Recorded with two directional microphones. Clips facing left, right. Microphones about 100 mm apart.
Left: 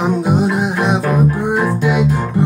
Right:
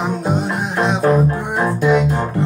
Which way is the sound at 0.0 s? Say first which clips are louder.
Left 4 dB; 5° left (ahead or behind).